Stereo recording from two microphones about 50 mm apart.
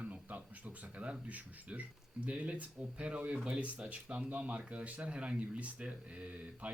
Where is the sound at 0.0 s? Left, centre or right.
Right.